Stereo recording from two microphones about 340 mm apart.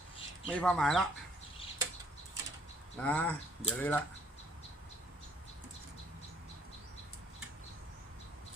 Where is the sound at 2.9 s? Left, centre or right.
Centre.